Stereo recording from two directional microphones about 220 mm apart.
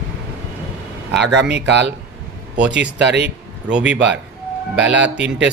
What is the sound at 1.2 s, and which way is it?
Speech, 50° right (ahead or behind).